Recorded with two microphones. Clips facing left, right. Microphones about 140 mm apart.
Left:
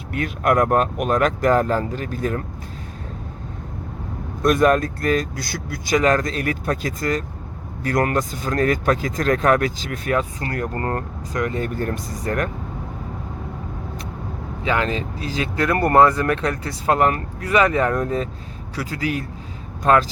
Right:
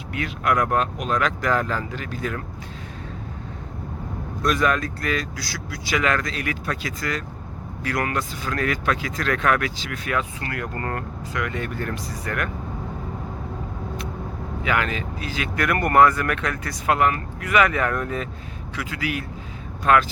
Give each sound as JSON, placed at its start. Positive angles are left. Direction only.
{"t": 0.1, "sound": "speech", "side_deg": 45}
{"t": 4.4, "sound": "speech", "side_deg": 45}
{"t": 14.6, "sound": "speech", "side_deg": 30}